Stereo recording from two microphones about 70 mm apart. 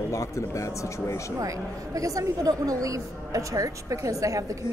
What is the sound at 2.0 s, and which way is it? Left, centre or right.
A woman's voice, right.